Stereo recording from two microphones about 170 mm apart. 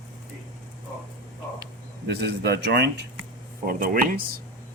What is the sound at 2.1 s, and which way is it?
Speech, 75° right (ahead or behind).